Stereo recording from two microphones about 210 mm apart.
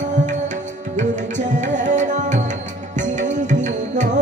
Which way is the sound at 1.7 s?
35° right (ahead or behind).